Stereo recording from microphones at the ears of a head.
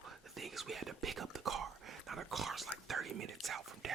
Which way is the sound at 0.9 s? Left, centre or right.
Right.